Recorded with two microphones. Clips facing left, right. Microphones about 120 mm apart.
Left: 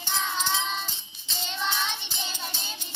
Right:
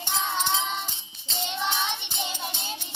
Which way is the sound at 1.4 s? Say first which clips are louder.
Right 2 dB; 20° right (ahead or behind).